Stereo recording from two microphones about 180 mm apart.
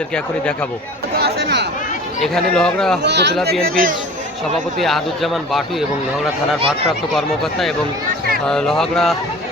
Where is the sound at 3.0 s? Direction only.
70° right (ahead or behind).